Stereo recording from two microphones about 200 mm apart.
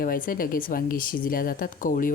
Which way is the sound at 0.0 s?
45° left (ahead or behind).